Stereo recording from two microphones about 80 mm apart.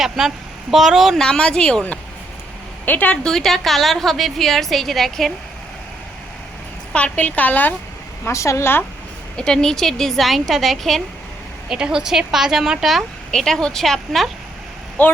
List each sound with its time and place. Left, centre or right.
0.0 s speech: centre
1.2 s speech: centre
2.8 s a woman's voice: left
3.2 s speech: centre
6.9 s a woman's voice: centre
8.3 s speech: left
9.4 s speech: centre
11.7 s speech: centre
15.0 s a woman's voice: left